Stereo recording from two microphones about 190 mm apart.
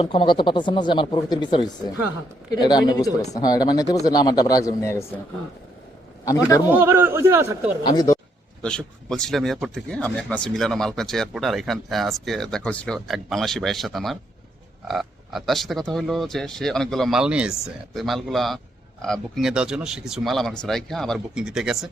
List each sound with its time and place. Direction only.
0.0 s speech: 25° left (ahead or behind)
6.7 s speech: 10° right (ahead or behind)
7.9 s speech: 20° left (ahead or behind)
8.6 s speech: 5° left (ahead or behind)